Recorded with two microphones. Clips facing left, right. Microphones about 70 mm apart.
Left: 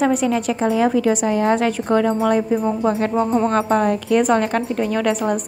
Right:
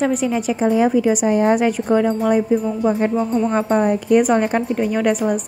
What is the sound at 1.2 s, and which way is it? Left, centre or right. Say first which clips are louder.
Speech: right 2 dB; centre.